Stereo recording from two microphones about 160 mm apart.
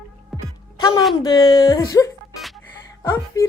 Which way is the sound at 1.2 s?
25° left (ahead or behind).